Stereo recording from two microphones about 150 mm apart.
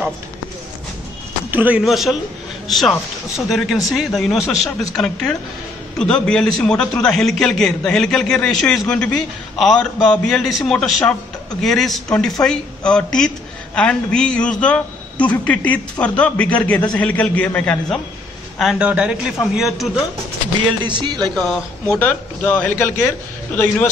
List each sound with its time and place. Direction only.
1.5 s a man's voice: 10° right (ahead or behind); by 18.0 s 5° left (ahead or behind)
18.6 s a man's voice: 5° right (ahead or behind)
20.8 s speech: 30° right (ahead or behind)
21.4 s a man's voice: 5° left (ahead or behind)